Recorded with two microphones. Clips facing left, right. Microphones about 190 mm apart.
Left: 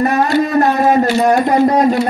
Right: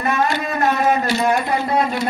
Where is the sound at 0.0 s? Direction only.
40° left (ahead or behind).